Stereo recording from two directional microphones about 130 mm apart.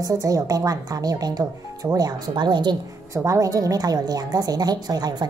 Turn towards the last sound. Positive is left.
turn(degrees=-30)  # may be behind; listen again after turning